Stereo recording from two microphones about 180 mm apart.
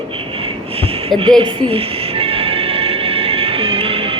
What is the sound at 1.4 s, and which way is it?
Music, 30° right (ahead or behind).